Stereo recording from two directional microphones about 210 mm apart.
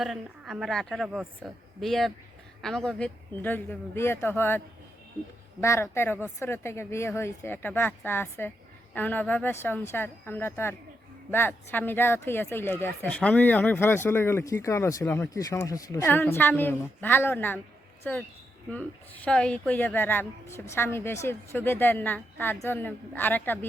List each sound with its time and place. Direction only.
0.0 s a woman's voice: centre (ahead or behind)